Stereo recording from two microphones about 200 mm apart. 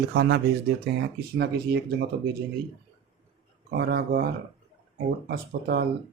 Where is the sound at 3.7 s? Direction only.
50° right (ahead or behind).